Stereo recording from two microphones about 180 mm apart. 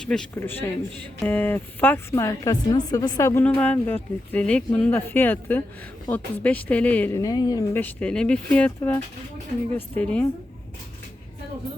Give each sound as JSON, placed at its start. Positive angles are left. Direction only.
{"t": 0.0, "sound": "a man's voice", "side_deg": 5}
{"t": 7.8, "sound": "a woman's voice", "side_deg": 10}